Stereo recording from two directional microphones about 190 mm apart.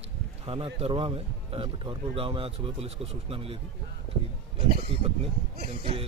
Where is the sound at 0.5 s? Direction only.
30° right (ahead or behind).